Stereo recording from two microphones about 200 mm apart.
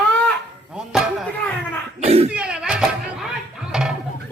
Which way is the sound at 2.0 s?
30° right (ahead or behind).